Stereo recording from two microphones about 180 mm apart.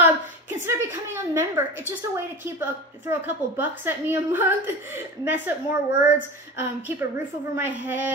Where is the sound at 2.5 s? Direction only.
15° right (ahead or behind).